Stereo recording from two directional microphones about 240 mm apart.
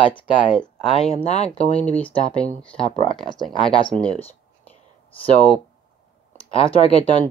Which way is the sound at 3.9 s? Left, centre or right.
Right.